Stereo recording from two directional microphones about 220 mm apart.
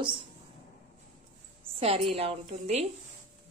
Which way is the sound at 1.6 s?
25° right (ahead or behind).